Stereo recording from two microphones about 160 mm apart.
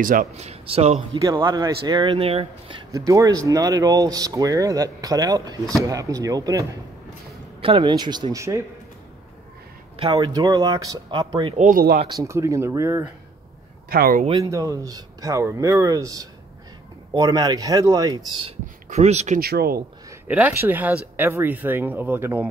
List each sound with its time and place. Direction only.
0.0 s speech: 60° right (ahead or behind)
0.4 s a man's voice: 40° right (ahead or behind)
1.1 s speech: 25° right (ahead or behind)
2.1 s speech: 35° right (ahead or behind)
3.1 s speech: 20° right (ahead or behind)
10.1 s speech: 20° right (ahead or behind)
11.7 s speech: 65° right (ahead or behind)
12.1 s speech: 20° right (ahead or behind)
13.8 s speech: 70° right (ahead or behind)
14.4 s speech: 20° right (ahead or behind)
18.9 s speech: 45° right (ahead or behind)
19.4 s speech: 70° right (ahead or behind)
20.1 s speech: 10° right (ahead or behind)